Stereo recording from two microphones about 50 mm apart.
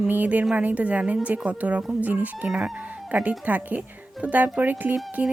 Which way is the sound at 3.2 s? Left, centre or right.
Right.